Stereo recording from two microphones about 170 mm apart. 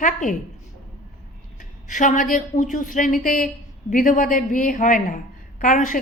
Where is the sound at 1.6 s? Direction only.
50° left (ahead or behind).